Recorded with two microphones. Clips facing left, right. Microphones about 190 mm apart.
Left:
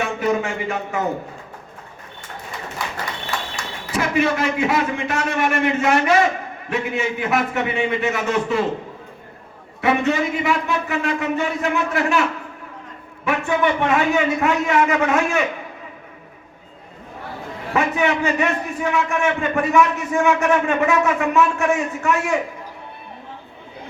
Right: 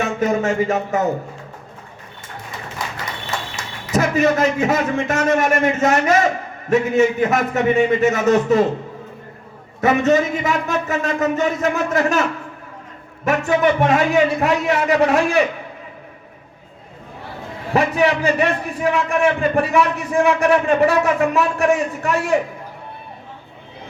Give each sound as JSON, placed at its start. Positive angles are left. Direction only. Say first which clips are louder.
{"t": 0.0, "sound": "speech", "louder": "right 2 dB", "side_deg": -45}
{"t": 3.9, "sound": "a man's voice", "louder": "right 3 dB", "side_deg": -45}
{"t": 9.8, "sound": "a man's voice", "louder": "right 4 dB", "side_deg": -45}
{"t": 13.2, "sound": "a man's voice", "louder": "right 3 dB", "side_deg": -40}
{"t": 17.7, "sound": "a man's voice", "louder": "right 3 dB", "side_deg": -35}